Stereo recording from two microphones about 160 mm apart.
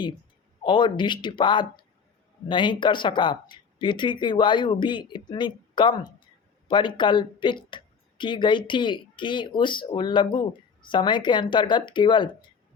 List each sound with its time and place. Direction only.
0.6 s speech: 30° left (ahead or behind)